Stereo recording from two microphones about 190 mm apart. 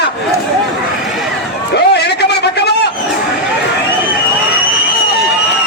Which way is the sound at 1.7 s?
60° left (ahead or behind).